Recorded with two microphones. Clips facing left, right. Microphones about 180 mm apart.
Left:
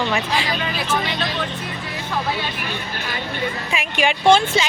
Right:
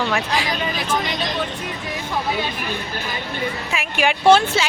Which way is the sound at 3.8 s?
5° right (ahead or behind).